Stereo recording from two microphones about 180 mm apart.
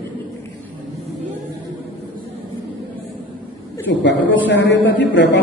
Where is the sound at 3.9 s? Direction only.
90° left.